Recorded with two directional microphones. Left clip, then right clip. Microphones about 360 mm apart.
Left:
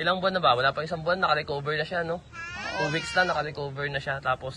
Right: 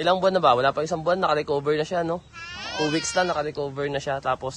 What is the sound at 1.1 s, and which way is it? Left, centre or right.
Speech, right.